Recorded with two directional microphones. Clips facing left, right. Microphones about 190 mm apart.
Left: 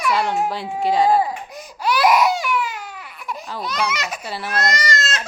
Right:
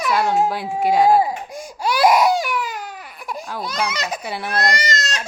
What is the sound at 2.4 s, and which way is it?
Baby cry, 40° right (ahead or behind).